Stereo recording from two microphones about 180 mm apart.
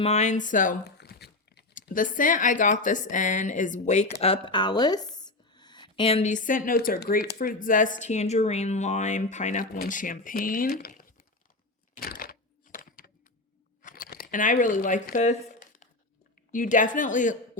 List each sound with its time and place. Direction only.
0.0 s speech: 40° left (ahead or behind)
0.9 s crumpling: 65° left (ahead or behind)
1.7 s speech: 50° left (ahead or behind)
11.9 s a sound: 55° left (ahead or behind)
16.5 s speech: 45° left (ahead or behind)